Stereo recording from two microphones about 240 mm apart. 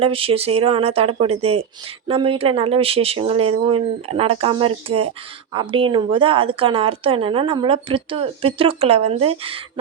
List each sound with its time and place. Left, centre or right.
0.0 s a woman's voice: right